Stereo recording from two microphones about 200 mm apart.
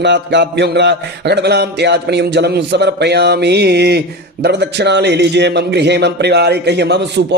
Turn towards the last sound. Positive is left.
turn(degrees=-60)  # may be behind; listen again after turning